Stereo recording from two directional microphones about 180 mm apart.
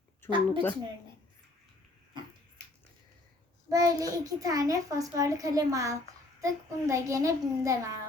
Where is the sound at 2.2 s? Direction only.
25° right (ahead or behind).